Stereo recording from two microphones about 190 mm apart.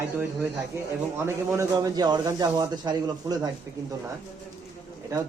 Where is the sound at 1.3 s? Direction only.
15° right (ahead or behind).